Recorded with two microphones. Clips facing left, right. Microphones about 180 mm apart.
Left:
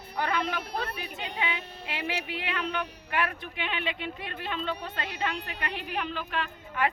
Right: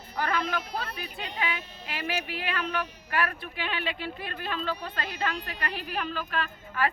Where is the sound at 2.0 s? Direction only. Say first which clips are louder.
Right 2 dB; 20° left (ahead or behind).